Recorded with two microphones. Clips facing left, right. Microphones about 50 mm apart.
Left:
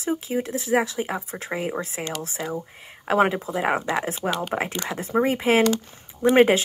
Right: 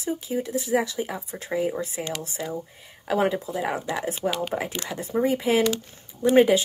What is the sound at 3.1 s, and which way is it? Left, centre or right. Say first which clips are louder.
Speech: left 3 dB; left.